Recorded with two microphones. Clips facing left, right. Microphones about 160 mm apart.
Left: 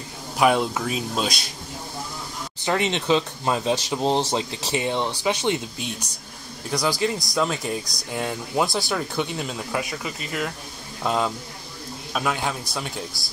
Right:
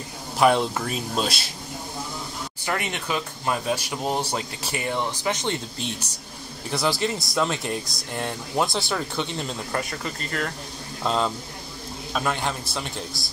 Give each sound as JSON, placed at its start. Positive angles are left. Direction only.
{"t": 0.4, "sound": "speech", "side_deg": 5}
{"t": 2.6, "sound": "speech", "side_deg": 25}
{"t": 6.7, "sound": "speech", "side_deg": -5}